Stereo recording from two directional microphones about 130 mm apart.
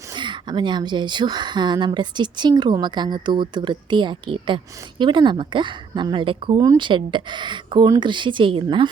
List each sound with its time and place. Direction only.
0.2 s a woman's voice: 35° right (ahead or behind)